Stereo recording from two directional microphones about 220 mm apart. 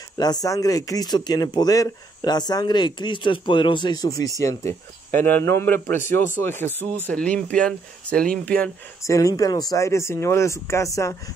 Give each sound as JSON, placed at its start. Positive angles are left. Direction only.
{"t": 0.2, "sound": "speech", "side_deg": 15}